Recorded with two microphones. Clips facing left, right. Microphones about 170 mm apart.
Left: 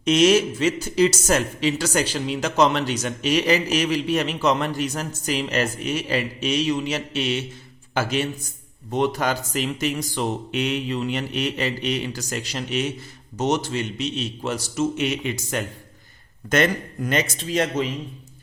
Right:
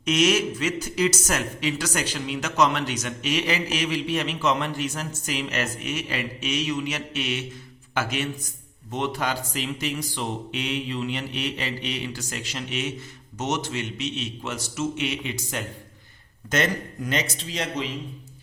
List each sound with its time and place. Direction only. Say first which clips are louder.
0.0 s a man's voice: left 5 dB; 30° left (ahead or behind); by 17.8 s 50° left (ahead or behind)